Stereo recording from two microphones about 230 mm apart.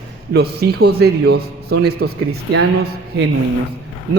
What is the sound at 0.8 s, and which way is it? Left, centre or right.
A man's voice, right.